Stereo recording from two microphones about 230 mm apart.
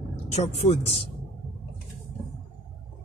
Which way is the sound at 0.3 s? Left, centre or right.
Left.